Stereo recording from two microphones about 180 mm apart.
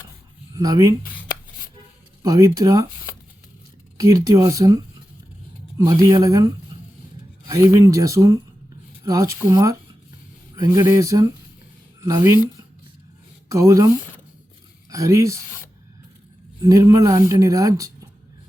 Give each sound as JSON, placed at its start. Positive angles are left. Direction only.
{"t": 0.5, "sound": "speech", "side_deg": -20}
{"t": 2.2, "sound": "speech", "side_deg": -20}
{"t": 3.9, "sound": "speech", "side_deg": -20}
{"t": 13.5, "sound": "speech", "side_deg": -20}
{"t": 16.6, "sound": "speech", "side_deg": -20}